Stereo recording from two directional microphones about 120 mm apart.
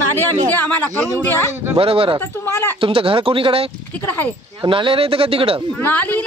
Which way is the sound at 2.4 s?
20° left (ahead or behind).